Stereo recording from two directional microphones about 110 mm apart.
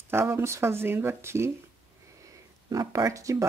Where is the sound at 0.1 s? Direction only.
25° right (ahead or behind).